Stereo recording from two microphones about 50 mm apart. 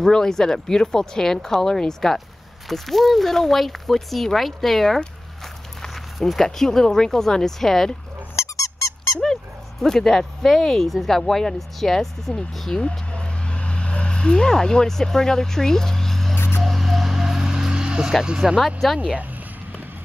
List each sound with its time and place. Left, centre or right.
0.0 s speech: centre
8.4 s squeak: left
9.2 s speech: centre
16.3 s a sound: left
16.6 s a sound: centre
18.4 s speech: centre
18.8 s speech: centre